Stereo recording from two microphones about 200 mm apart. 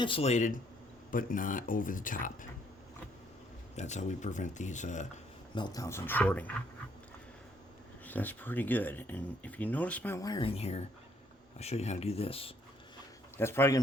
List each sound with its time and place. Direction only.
0.0 s speech: 30° left (ahead or behind)
3.8 s speech: 35° left (ahead or behind)
5.5 s speech: 20° left (ahead or behind)
8.0 s speech: 10° left (ahead or behind); by 12.5 s 30° left (ahead or behind)
13.3 s speech: 10° left (ahead or behind)